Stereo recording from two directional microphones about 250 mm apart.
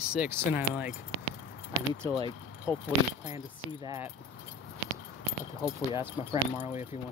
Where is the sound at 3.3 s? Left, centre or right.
Centre.